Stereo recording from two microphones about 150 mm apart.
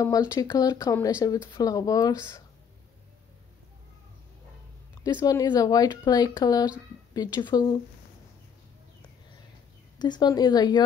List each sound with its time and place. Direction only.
0.0 s speech: 25° left (ahead or behind)
5.0 s speech: 25° left (ahead or behind)
9.9 s speech: 30° left (ahead or behind)